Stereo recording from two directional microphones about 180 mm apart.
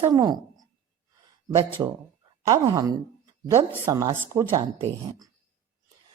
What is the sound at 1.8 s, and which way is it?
A woman's voice, 20° right (ahead or behind).